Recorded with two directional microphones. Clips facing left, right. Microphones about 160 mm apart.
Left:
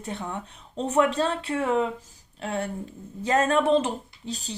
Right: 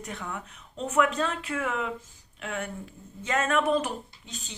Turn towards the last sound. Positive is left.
turn(degrees=35)  # may be behind; listen again after turning